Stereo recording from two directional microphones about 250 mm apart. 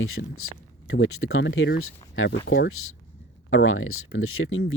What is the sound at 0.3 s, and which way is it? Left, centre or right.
Speech, left.